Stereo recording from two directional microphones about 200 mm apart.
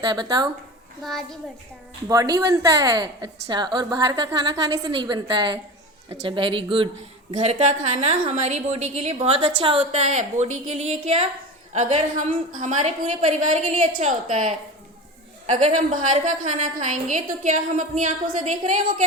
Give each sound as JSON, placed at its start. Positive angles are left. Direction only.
{"t": 0.0, "sound": "a woman's voice", "side_deg": -20}
{"t": 1.0, "sound": "a child's voice", "side_deg": 0}
{"t": 2.0, "sound": "a woman's voice", "side_deg": -15}
{"t": 15.6, "sound": "a woman's voice", "side_deg": -35}